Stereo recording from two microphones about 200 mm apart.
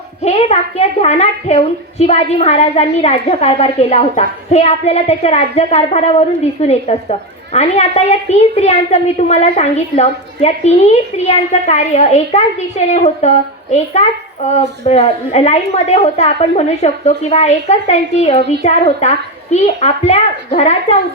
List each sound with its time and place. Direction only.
0.2 s a child's voice: 30° left (ahead or behind)